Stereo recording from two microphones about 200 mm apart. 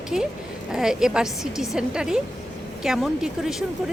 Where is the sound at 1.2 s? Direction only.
15° left (ahead or behind).